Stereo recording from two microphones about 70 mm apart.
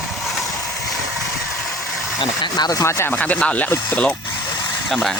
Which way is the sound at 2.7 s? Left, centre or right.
Left.